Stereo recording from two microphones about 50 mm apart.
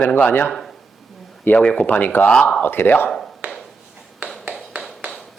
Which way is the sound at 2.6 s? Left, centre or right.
Left.